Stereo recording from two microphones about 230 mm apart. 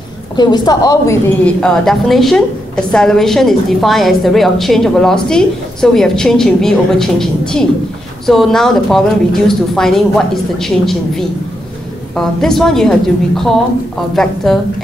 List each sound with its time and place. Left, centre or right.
0.4 s a woman's voice: centre
1.4 s a woman's voice: centre